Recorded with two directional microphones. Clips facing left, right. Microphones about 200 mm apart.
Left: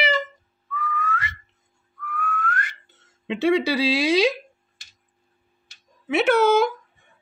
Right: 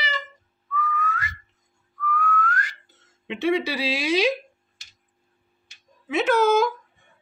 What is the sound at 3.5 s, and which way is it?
Speech, 90° left.